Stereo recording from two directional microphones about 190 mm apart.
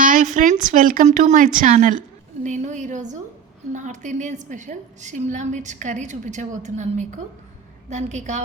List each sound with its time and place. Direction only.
0.0 s a woman's voice: 45° right (ahead or behind)